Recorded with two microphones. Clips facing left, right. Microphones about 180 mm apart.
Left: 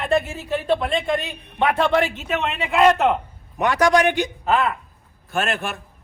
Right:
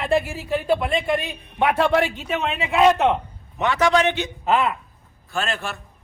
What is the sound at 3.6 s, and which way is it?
Speech, 15° left (ahead or behind).